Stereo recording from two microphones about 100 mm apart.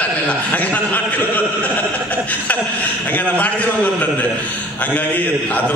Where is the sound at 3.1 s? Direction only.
15° left (ahead or behind).